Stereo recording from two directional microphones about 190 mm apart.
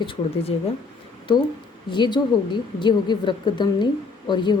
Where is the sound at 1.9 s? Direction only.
25° left (ahead or behind).